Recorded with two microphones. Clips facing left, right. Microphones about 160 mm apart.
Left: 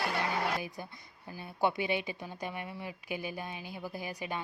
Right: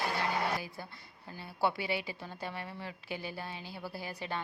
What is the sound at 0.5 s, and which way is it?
A woman's voice, 20° left (ahead or behind).